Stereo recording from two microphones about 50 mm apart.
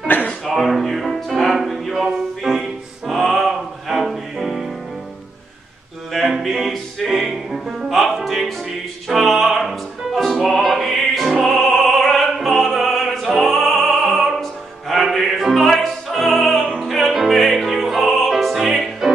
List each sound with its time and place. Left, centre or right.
0.0 s a sound: left
0.5 s music: centre
6.2 s music: centre
9.1 s opera: centre
10.2 s music: centre
11.4 s opera: centre